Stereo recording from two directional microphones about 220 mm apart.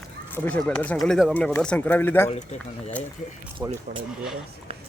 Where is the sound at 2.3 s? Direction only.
30° left (ahead or behind).